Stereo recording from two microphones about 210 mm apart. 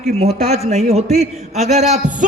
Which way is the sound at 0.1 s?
30° right (ahead or behind).